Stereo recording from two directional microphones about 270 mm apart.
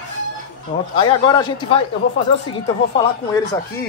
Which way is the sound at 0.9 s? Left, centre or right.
Centre.